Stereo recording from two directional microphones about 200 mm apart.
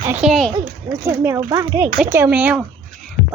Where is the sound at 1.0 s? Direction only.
10° right (ahead or behind).